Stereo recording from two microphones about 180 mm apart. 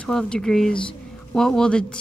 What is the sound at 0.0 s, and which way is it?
A woman's voice, 5° left (ahead or behind).